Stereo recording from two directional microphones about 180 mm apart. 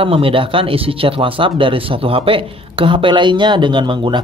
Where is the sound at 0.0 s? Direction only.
30° right (ahead or behind).